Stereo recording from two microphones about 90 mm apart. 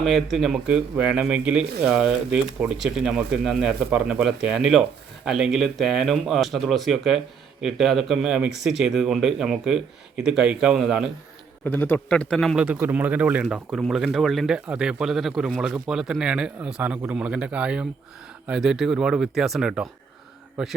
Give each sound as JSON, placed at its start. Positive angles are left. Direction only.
{"t": 0.0, "sound": "speech", "side_deg": 0}
{"t": 0.7, "sound": "speech", "side_deg": -15}
{"t": 11.6, "sound": "a man's voice", "side_deg": 20}
{"t": 12.5, "sound": "speech", "side_deg": -15}